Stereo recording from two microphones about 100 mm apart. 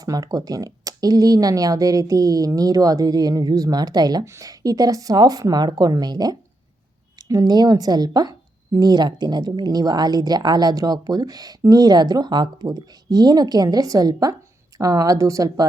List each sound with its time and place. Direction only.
0.0 s speech: 40° right (ahead or behind)